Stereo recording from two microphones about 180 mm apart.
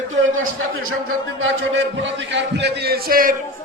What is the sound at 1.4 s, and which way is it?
A man's voice, 90° right.